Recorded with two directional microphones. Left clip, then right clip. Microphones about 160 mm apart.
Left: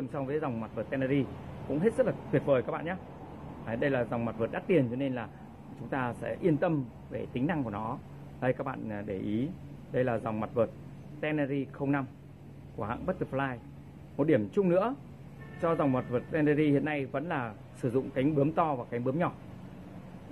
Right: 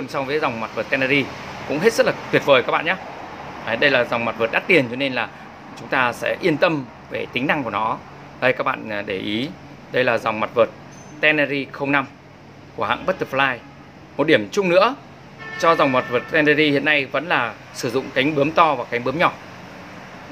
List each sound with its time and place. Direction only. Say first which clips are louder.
0.1 s speech: right 13 dB; 10° right (ahead or behind)